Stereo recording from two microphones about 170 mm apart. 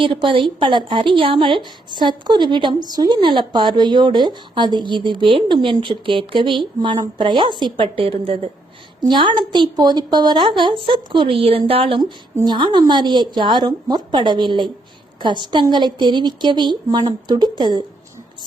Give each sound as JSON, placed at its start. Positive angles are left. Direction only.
{"t": 0.0, "sound": "a woman's voice", "side_deg": -30}